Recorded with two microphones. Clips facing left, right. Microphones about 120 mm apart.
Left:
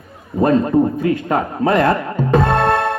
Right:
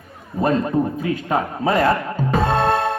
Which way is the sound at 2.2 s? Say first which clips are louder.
Left 6 dB; 55° left (ahead or behind).